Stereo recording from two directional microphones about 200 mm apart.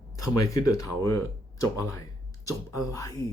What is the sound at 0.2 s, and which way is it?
Speech, 15° left (ahead or behind).